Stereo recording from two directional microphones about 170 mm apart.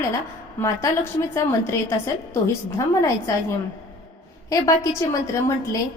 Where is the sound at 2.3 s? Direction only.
15° left (ahead or behind).